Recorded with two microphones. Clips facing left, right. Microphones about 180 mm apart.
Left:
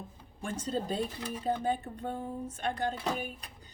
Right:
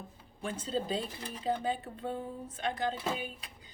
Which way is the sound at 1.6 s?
45° left (ahead or behind).